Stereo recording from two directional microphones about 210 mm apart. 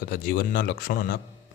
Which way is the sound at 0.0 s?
45° left (ahead or behind).